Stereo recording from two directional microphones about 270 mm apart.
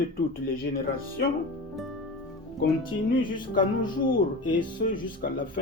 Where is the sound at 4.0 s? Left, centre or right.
Left.